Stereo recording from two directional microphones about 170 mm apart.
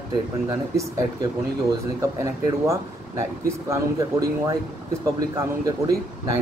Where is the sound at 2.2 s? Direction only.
15° right (ahead or behind).